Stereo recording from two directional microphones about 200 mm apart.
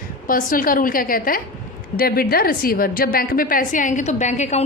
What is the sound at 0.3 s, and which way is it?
A woman's voice, 45° left (ahead or behind).